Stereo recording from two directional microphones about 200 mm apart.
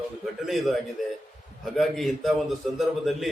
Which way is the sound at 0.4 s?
Centre (ahead or behind).